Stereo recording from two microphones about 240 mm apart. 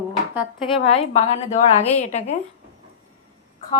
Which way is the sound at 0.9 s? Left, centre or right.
Left.